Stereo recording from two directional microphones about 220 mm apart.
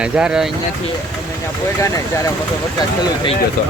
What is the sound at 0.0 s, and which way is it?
Speech, 5° right (ahead or behind).